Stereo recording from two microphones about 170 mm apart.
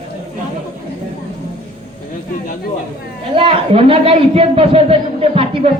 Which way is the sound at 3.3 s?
35° right (ahead or behind).